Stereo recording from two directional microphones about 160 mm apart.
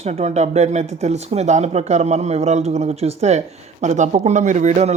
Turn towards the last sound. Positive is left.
turn(degrees=-45)  # may be behind; listen again after turning